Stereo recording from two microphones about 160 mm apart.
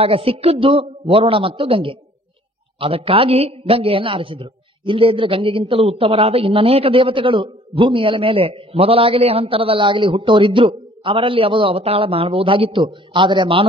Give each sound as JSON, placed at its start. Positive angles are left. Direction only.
{"t": 0.0, "sound": "a man's voice", "side_deg": -35}